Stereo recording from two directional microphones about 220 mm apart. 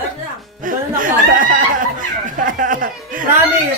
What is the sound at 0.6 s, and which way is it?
Speech, 40° right (ahead or behind).